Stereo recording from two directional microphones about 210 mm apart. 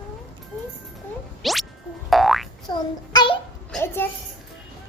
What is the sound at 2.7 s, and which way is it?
Child singing, 20° left (ahead or behind).